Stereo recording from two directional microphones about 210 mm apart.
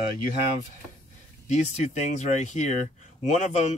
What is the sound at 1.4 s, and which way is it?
Speech, 35° left (ahead or behind).